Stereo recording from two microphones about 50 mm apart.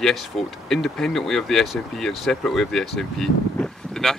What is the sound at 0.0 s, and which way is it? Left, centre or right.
Speech, centre.